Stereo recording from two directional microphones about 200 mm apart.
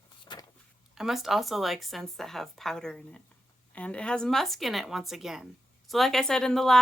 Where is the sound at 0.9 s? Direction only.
Centre (ahead or behind).